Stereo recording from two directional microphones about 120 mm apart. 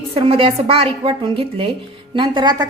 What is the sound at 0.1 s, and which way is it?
A woman's voice, 50° right (ahead or behind).